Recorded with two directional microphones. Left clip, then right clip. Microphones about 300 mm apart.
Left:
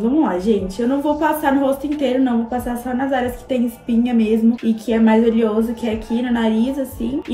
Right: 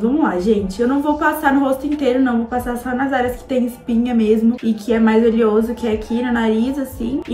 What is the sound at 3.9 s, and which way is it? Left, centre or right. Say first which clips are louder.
A woman's voice: right 1 dB; centre.